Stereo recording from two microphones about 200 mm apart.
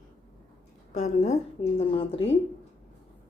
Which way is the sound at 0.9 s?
35° left (ahead or behind).